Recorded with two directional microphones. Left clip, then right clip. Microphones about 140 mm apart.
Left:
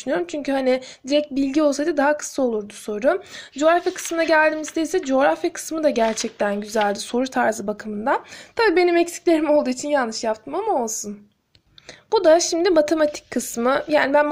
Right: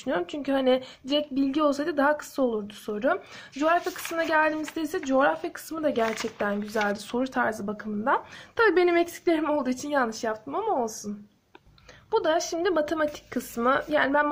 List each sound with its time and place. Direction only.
0.0 s a woman's voice: 25° left (ahead or behind)
6.1 s speech: 25° left (ahead or behind)
12.1 s a woman's voice: 35° left (ahead or behind)